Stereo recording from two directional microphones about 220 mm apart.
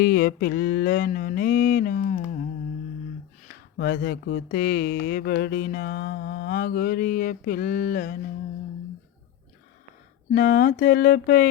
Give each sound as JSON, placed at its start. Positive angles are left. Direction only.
{"t": 0.0, "sound": "mantra", "side_deg": 45}
{"t": 3.8, "sound": "mantra", "side_deg": 50}
{"t": 10.3, "sound": "mantra", "side_deg": 35}